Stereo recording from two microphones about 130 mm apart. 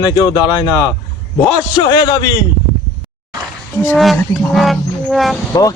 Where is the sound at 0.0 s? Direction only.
30° left (ahead or behind).